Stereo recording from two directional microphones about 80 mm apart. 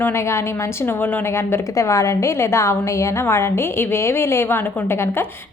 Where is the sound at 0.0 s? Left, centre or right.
Left.